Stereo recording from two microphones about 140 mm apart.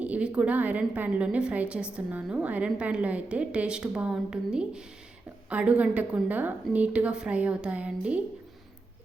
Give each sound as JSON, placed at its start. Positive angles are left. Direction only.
{"t": 0.0, "sound": "a woman's voice", "side_deg": -10}